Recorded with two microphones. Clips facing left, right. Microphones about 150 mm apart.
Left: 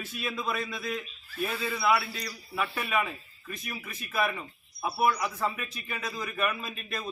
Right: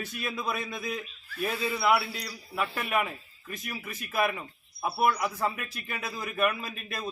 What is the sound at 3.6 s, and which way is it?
A man's voice, 5° right (ahead or behind).